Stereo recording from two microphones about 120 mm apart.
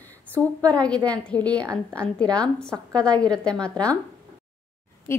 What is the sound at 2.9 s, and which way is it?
A woman's voice, 10° left (ahead or behind).